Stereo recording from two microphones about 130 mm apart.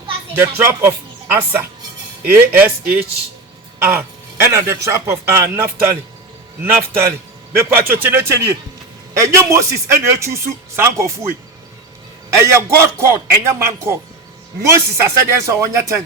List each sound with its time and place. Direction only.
0.6 s speech: 20° right (ahead or behind)
12.4 s speech: 20° right (ahead or behind)